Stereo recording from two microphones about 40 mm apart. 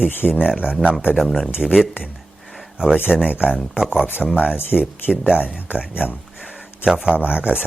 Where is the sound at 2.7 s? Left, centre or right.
Centre.